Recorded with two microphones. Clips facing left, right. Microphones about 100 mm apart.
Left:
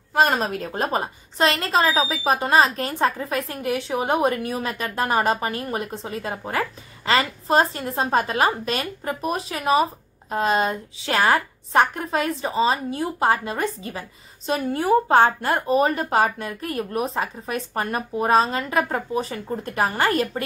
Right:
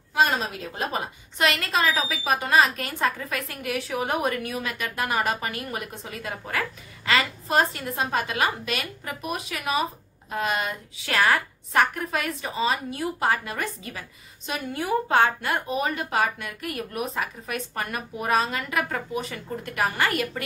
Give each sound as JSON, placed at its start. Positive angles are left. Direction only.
{"t": 0.1, "sound": "a woman's voice", "side_deg": 45}